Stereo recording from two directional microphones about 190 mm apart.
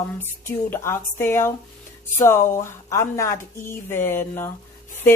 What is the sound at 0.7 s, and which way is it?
Speech, 15° left (ahead or behind).